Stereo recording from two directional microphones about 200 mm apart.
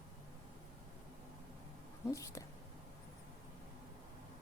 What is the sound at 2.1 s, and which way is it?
Speech, 15° left (ahead or behind).